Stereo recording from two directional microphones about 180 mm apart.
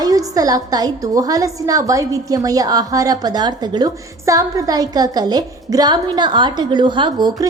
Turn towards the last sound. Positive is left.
turn(degrees=-25)  # may be behind; listen again after turning